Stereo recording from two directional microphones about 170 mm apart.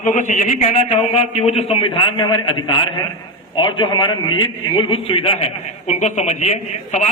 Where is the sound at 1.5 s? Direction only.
35° left (ahead or behind).